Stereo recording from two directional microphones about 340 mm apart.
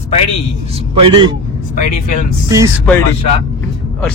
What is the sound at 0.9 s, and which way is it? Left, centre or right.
Speech, centre.